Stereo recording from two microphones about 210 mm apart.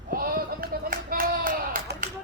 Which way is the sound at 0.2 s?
45° right (ahead or behind).